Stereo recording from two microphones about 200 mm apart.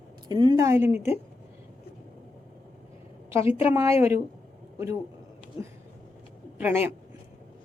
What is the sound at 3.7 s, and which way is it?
Speech, 10° right (ahead or behind).